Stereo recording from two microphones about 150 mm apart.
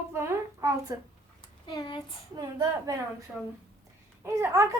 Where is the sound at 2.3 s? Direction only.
25° right (ahead or behind).